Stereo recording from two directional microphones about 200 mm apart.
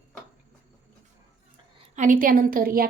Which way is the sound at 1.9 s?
40° right (ahead or behind).